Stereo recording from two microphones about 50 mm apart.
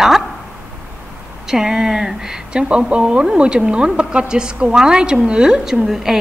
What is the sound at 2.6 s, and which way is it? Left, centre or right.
A woman's voice, right.